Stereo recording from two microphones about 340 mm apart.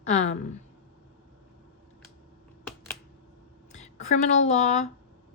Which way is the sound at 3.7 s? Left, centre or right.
Left.